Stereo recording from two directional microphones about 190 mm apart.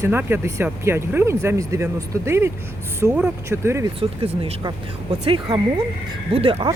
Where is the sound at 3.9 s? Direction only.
30° right (ahead or behind).